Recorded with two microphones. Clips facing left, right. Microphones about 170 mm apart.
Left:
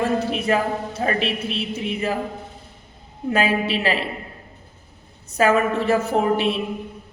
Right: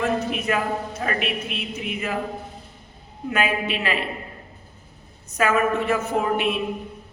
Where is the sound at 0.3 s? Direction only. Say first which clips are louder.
Left 3 dB; 30° left (ahead or behind).